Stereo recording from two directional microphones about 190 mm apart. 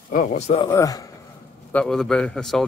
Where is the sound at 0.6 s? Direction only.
20° left (ahead or behind).